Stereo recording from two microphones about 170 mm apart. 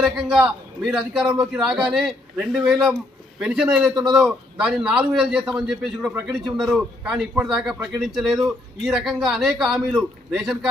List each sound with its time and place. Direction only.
0.0 s a man's voice: centre (ahead or behind)